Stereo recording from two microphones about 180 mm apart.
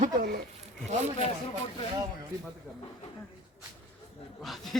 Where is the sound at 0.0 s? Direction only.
60° right (ahead or behind).